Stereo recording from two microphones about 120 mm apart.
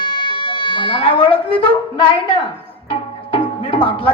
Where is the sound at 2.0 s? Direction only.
40° left (ahead or behind).